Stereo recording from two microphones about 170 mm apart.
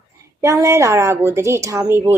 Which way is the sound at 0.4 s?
15° right (ahead or behind).